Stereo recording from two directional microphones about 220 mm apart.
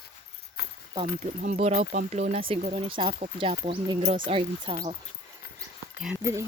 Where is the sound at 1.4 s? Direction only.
30° right (ahead or behind).